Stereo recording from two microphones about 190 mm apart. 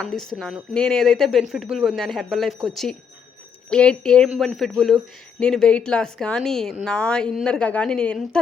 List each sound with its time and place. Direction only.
0.0 s a woman's voice: 5° left (ahead or behind)